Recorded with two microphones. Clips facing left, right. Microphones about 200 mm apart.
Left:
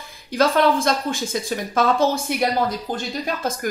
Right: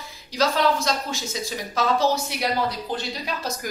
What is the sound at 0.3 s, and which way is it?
Speech, 50° left (ahead or behind).